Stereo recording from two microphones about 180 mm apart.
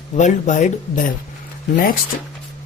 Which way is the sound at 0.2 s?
40° left (ahead or behind).